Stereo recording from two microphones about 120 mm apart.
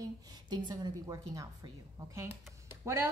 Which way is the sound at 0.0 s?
30° right (ahead or behind).